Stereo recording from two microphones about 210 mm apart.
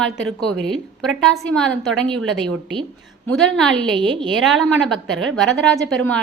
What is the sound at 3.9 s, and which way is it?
Speech, 25° right (ahead or behind).